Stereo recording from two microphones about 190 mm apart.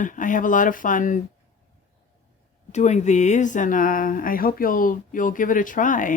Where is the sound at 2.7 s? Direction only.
35° left (ahead or behind).